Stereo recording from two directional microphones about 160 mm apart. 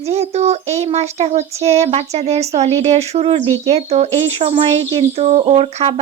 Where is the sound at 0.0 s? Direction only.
40° right (ahead or behind).